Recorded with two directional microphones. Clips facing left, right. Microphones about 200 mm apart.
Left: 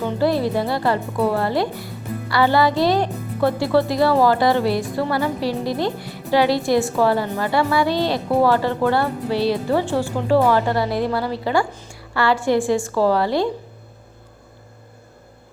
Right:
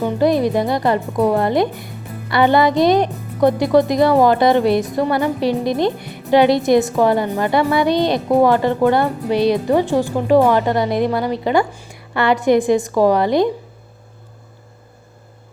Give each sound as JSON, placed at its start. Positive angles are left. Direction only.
{"t": 0.0, "sound": "a woman's voice", "side_deg": -15}